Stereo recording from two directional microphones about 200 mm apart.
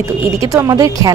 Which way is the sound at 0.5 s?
15° right (ahead or behind).